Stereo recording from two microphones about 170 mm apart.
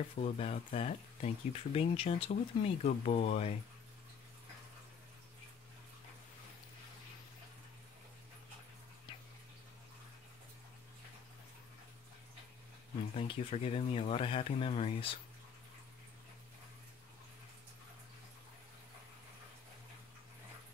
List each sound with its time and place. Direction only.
0.2 s speech: 35° left (ahead or behind)
13.1 s speech: 35° left (ahead or behind)